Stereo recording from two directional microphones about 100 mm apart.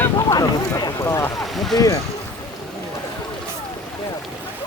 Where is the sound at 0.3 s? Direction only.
45° left (ahead or behind).